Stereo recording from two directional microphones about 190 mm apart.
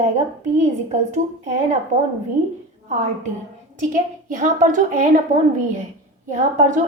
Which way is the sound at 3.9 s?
45° right (ahead or behind).